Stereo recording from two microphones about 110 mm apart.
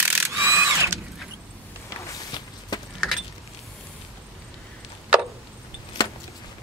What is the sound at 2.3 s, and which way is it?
Walk, 40° left (ahead or behind).